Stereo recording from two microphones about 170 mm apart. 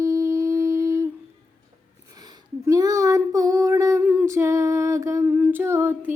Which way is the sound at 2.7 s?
20° right (ahead or behind).